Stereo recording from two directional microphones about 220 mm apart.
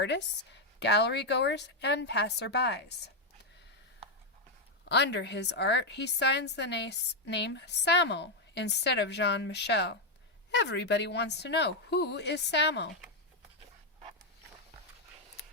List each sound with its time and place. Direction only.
0.0 s a woman's voice: 50° left (ahead or behind)
4.9 s a woman's voice: 50° left (ahead or behind)